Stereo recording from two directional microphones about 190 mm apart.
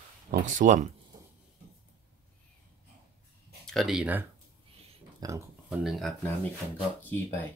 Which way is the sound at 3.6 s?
Centre (ahead or behind).